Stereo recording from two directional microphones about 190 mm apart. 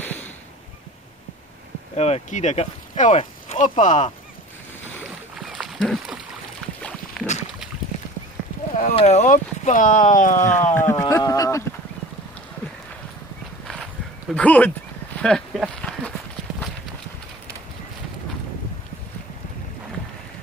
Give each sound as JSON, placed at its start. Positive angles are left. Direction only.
{"t": 2.0, "sound": "speech", "side_deg": 35}
{"t": 5.5, "sound": "a sound", "side_deg": 0}
{"t": 8.8, "sound": "speech", "side_deg": 35}
{"t": 10.7, "sound": "speech", "side_deg": 15}
{"t": 14.3, "sound": "speech", "side_deg": 5}
{"t": 15.2, "sound": "a sound", "side_deg": 0}